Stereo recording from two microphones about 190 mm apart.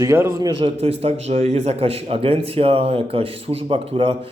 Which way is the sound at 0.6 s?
30° right (ahead or behind).